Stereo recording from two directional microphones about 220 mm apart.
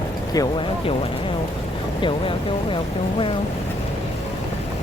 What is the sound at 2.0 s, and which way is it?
Speech, 25° left (ahead or behind).